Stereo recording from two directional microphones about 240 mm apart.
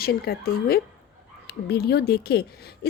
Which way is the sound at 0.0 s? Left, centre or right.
Left.